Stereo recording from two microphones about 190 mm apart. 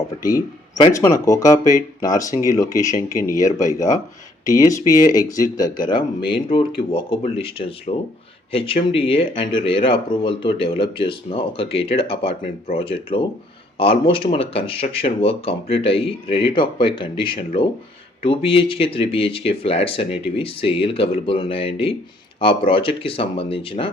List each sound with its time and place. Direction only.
0.3 s a man's voice: 20° left (ahead or behind)